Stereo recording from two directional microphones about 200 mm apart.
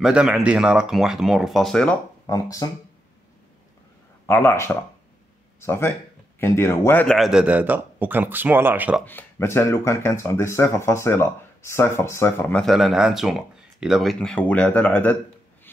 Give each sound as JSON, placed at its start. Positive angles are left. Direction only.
{"t": 0.0, "sound": "speech", "side_deg": -5}
{"t": 2.6, "sound": "speech", "side_deg": 20}
{"t": 4.3, "sound": "speech", "side_deg": 10}
{"t": 9.0, "sound": "speech", "side_deg": 10}